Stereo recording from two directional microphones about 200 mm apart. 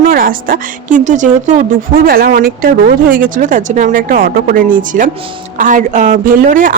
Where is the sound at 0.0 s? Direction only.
45° right (ahead or behind).